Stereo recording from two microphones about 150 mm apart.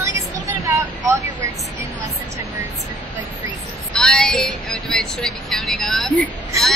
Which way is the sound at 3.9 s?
5° left (ahead or behind).